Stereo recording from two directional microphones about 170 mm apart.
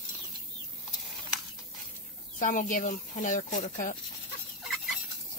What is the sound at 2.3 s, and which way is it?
Speech, 50° left (ahead or behind).